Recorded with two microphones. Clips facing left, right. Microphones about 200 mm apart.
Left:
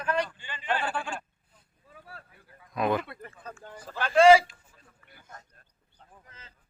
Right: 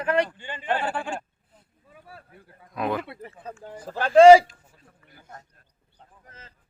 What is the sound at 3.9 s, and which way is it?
Speech, 40° right (ahead or behind).